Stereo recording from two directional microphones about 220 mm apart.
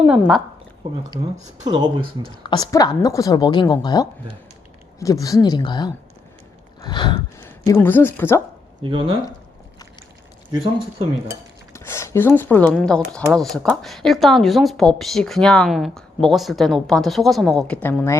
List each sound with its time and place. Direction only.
0.0 s speech: 5° right (ahead or behind)
1.6 s speech: 20° right (ahead or behind)
2.2 s a woman's voice: 20° left (ahead or behind)
8.8 s speech: 25° right (ahead or behind)
11.7 s speech: 10° left (ahead or behind)